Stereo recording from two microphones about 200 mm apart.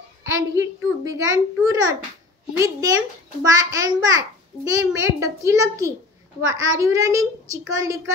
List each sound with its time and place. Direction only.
0.2 s a child's voice: 15° right (ahead or behind)